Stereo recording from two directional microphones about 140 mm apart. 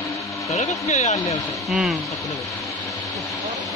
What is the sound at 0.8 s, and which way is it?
Speech, 55° left (ahead or behind).